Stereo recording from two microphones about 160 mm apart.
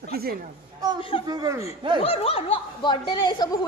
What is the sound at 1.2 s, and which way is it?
Speech, 25° right (ahead or behind).